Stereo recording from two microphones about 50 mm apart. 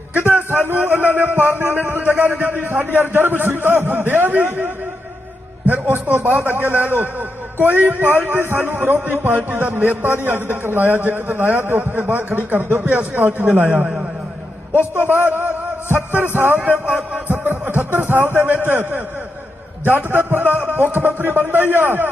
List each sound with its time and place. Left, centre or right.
0.3 s a man's voice: right
4.4 s a man's voice: right
5.6 s a man's voice: right
12.8 s a man's voice: right
13.5 s a man's voice: right
15.1 s a sound: right
16.1 s speech: right
17.2 s a sound: right
18.6 s a man's voice: right